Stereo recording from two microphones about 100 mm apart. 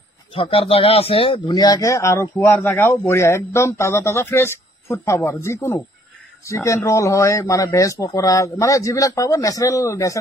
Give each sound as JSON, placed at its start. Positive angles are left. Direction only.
{"t": 0.3, "sound": "speech", "side_deg": 70}
{"t": 1.5, "sound": "a man's voice", "side_deg": 40}